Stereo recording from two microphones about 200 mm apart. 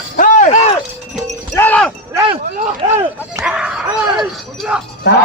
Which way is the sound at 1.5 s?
10° left (ahead or behind).